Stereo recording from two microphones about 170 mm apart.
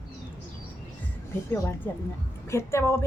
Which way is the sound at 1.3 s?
10° left (ahead or behind).